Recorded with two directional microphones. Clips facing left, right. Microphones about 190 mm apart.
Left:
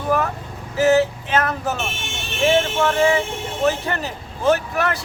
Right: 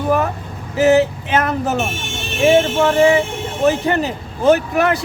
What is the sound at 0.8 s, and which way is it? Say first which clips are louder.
A man's voice: right 3 dB; 20° right (ahead or behind).